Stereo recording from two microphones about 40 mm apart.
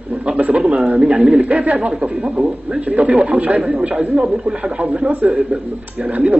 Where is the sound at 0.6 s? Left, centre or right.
Right.